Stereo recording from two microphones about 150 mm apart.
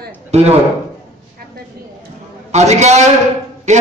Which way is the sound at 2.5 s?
50° right (ahead or behind).